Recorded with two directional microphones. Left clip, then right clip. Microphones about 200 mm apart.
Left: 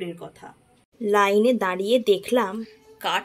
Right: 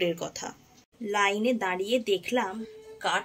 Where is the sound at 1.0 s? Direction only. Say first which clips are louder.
Left 7 dB; 25° left (ahead or behind).